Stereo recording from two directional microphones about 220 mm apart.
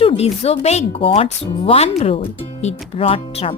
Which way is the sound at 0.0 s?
25° left (ahead or behind).